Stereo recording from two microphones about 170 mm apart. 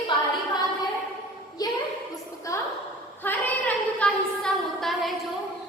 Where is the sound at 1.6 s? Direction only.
20° left (ahead or behind).